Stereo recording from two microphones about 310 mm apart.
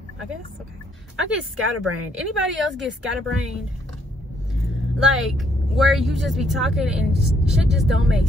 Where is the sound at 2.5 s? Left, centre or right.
Centre.